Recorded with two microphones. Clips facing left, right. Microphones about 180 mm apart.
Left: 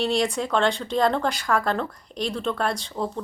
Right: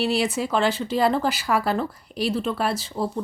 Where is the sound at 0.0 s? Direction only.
5° right (ahead or behind).